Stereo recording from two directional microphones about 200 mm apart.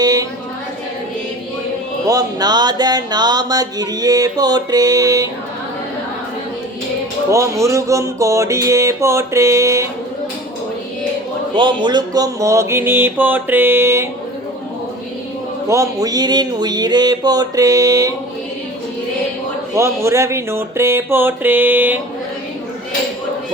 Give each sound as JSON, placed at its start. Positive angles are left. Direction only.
{"t": 0.0, "sound": "a sound", "side_deg": -20}
{"t": 2.0, "sound": "music", "side_deg": -20}
{"t": 7.3, "sound": "mantra", "side_deg": -15}
{"t": 11.5, "sound": "mantra", "side_deg": -25}
{"t": 15.7, "sound": "music", "side_deg": -15}
{"t": 19.7, "sound": "mantra", "side_deg": -15}